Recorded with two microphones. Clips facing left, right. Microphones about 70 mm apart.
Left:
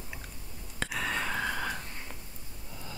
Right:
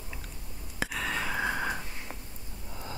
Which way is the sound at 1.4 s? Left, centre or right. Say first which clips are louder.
Right 2 dB; centre.